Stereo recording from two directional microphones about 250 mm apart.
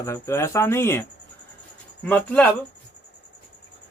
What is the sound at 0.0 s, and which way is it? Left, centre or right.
Speech, centre.